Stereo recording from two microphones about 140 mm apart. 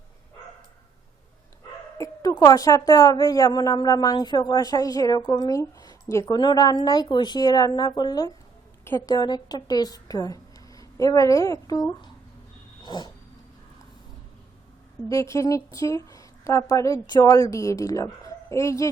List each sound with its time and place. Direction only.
2.0 s a woman's voice: 25° left (ahead or behind)
6.4 s a woman's voice: 30° left (ahead or behind)
12.8 s dog: 30° left (ahead or behind)
15.1 s a woman's voice: 20° left (ahead or behind)